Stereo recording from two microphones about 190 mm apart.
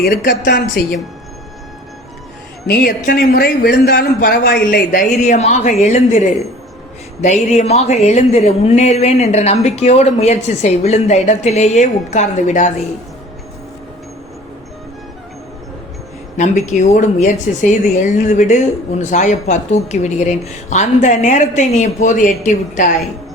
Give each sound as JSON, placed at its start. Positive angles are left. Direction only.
{"t": 0.0, "sound": "a woman's voice", "side_deg": 55}
{"t": 2.6, "sound": "a man's voice", "side_deg": 55}
{"t": 7.5, "sound": "a woman's voice", "side_deg": 35}
{"t": 16.4, "sound": "a woman's voice", "side_deg": 40}